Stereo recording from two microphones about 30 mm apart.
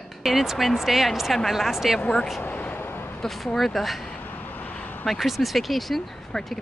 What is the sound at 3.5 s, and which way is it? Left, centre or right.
Speech, centre.